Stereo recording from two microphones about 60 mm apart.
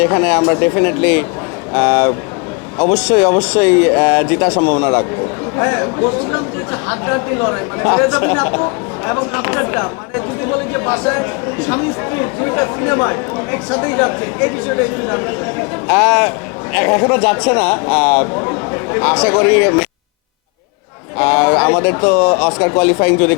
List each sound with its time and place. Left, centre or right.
0.0 s speech: left
18.3 s a sound: left
19.1 s speech: centre
21.2 s speech: left